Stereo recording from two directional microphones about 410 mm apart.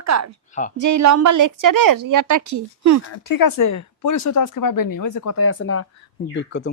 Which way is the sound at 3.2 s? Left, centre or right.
Left.